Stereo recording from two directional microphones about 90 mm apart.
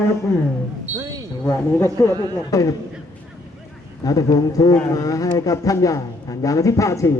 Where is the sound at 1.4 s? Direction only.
30° left (ahead or behind).